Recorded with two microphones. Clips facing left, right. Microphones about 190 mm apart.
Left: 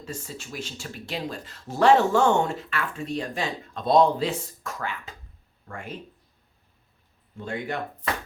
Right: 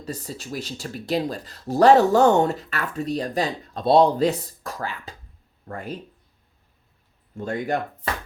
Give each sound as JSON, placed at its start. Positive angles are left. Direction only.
{"t": 0.0, "sound": "speech", "side_deg": -40}
{"t": 7.3, "sound": "speech", "side_deg": -40}